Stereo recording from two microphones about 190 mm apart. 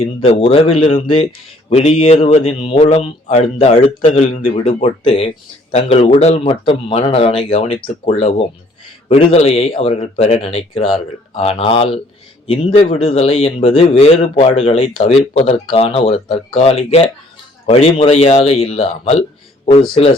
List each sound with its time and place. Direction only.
0.0 s speech: 30° left (ahead or behind)
12.9 s speech: 35° left (ahead or behind)